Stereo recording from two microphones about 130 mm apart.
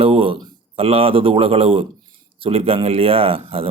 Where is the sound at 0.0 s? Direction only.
45° right (ahead or behind).